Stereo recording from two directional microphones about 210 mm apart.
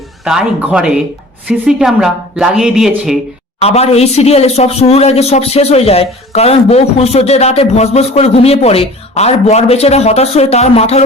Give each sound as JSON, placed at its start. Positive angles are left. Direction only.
{"t": 0.3, "sound": "speech", "side_deg": -5}
{"t": 3.6, "sound": "a man's voice", "side_deg": 30}